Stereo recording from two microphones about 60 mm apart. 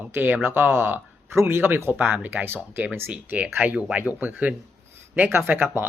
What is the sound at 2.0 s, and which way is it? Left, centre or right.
Speech, centre.